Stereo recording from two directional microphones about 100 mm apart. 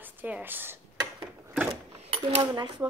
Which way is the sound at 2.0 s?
90° right.